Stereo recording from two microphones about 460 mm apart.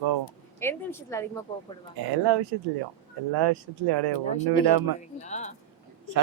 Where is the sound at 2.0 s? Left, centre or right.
Right.